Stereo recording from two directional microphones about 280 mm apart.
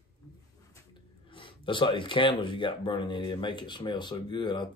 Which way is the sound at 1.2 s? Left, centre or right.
Centre.